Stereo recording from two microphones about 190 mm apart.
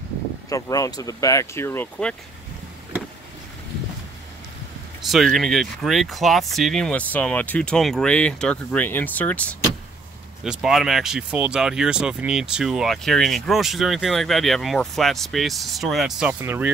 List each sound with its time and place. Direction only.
0.5 s speech: 20° left (ahead or behind)
5.0 s speech: centre (ahead or behind)